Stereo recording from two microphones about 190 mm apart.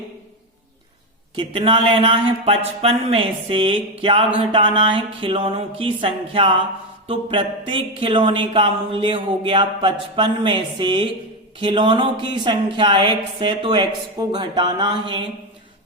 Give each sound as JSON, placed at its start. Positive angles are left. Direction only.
{"t": 1.4, "sound": "speech", "side_deg": -25}